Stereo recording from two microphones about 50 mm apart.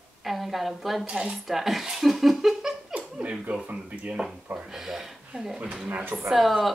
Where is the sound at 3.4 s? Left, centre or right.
Right.